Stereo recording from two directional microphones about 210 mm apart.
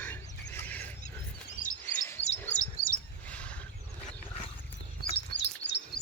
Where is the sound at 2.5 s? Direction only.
40° left (ahead or behind).